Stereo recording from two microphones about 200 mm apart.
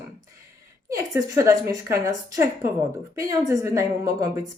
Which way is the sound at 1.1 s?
15° right (ahead or behind).